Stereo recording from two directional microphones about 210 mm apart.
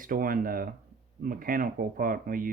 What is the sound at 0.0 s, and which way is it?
Speech, 40° right (ahead or behind).